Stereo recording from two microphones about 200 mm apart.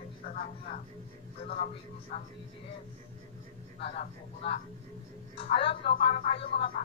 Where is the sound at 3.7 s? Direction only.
30° left (ahead or behind).